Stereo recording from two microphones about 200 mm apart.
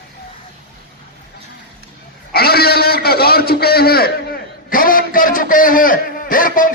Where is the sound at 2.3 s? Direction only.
50° left (ahead or behind).